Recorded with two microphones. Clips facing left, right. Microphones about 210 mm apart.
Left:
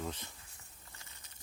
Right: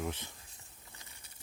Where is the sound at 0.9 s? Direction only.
15° right (ahead or behind).